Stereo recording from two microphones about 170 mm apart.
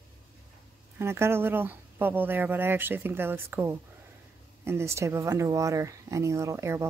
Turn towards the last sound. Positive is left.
turn(degrees=-15)  # may be behind; listen again after turning